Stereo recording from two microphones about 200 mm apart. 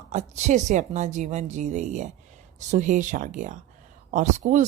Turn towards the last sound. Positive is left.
turn(degrees=-40)  # may be behind; listen again after turning